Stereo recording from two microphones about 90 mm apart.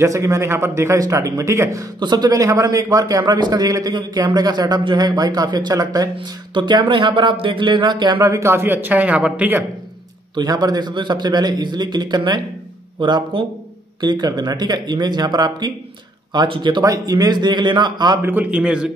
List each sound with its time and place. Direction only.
0.0 s a man's voice: 35° right (ahead or behind)
2.0 s a man's voice: 50° right (ahead or behind)
6.1 s speech: 60° right (ahead or behind)
8.2 s a man's voice: 35° right (ahead or behind); by 9.7 s 15° right (ahead or behind)
10.3 s a man's voice: 50° right (ahead or behind)
16.4 s speech: 65° right (ahead or behind)
16.8 s a man's voice: 40° right (ahead or behind)
18.2 s a man's voice: 20° right (ahead or behind)